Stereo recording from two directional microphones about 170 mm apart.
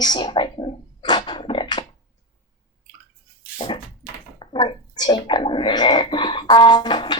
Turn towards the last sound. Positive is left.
turn(degrees=25)  # may be behind; listen again after turning